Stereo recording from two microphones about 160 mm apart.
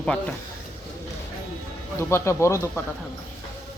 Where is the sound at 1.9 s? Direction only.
15° left (ahead or behind).